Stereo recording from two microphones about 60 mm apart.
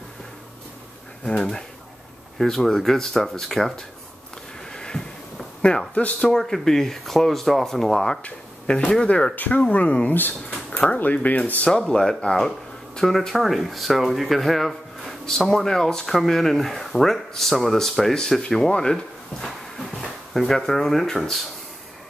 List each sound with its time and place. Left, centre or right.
1.2 s speech: centre
4.6 s a sound: centre
6.3 s speech: centre
8.2 s speech: centre
11.7 s speech: centre
19.4 s speech: centre